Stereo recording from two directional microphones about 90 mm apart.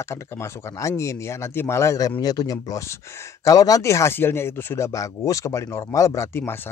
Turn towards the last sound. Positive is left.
turn(degrees=25)  # may be behind; listen again after turning